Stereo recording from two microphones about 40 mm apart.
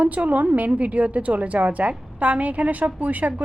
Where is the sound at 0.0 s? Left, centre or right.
Right.